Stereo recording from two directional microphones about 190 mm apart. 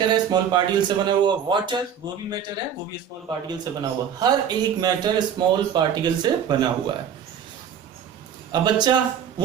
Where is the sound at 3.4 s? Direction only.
20° right (ahead or behind).